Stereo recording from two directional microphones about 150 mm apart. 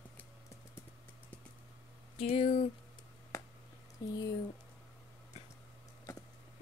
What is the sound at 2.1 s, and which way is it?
Speech, 40° left (ahead or behind).